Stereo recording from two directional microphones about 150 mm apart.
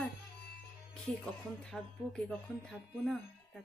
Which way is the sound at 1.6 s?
5° left (ahead or behind).